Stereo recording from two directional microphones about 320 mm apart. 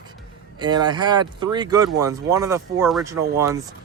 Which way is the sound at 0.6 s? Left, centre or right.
Centre.